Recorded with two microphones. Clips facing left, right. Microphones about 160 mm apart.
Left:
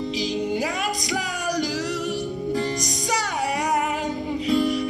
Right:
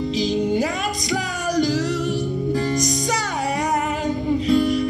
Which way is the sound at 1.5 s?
10° left (ahead or behind).